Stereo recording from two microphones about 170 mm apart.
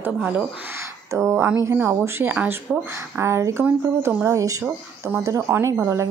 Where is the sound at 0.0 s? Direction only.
10° right (ahead or behind).